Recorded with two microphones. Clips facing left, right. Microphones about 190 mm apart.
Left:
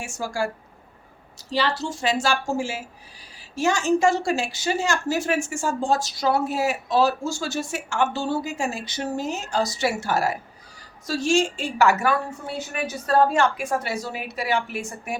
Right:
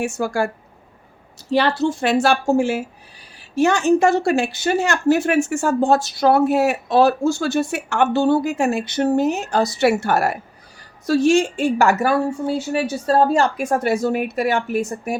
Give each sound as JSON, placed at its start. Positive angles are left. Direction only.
{"t": 0.0, "sound": "a woman's voice", "side_deg": -60}
{"t": 12.5, "sound": "a woman's voice", "side_deg": -30}